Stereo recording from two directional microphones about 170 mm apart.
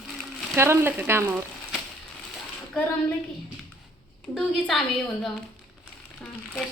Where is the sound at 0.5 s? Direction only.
15° right (ahead or behind).